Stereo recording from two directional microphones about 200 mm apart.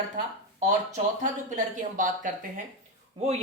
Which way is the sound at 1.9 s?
40° right (ahead or behind).